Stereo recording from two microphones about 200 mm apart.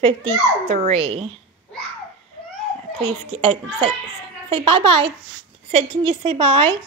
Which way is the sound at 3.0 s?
30° right (ahead or behind).